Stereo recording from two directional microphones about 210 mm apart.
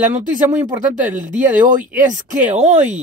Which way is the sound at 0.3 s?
35° right (ahead or behind).